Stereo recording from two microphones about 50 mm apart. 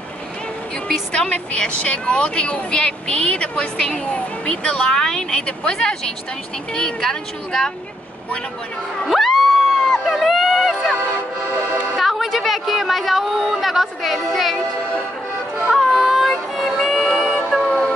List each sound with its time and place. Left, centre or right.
1.1 s speech: left
9.0 s crowd: centre
9.9 s a sound: centre
12.0 s a woman's voice: centre
15.7 s child singing: centre
17.1 s music: centre
17.6 s music: centre